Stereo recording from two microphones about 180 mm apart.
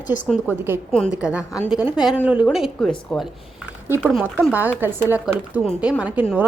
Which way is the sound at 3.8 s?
15° right (ahead or behind).